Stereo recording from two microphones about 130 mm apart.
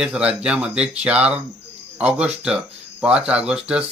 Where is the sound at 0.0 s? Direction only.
5° right (ahead or behind).